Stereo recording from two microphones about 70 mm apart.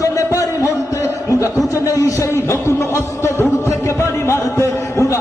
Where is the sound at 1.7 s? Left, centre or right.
Left.